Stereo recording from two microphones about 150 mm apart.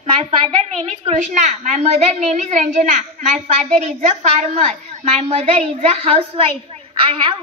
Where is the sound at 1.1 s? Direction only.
50° right (ahead or behind).